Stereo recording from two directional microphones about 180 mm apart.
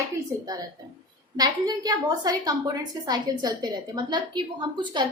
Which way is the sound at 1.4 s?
20° right (ahead or behind).